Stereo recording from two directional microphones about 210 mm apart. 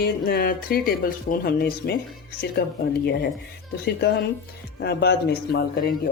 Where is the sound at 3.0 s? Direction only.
50° left (ahead or behind).